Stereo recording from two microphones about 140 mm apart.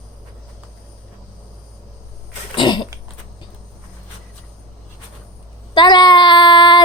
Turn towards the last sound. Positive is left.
turn(degrees=30)  # may be behind; listen again after turning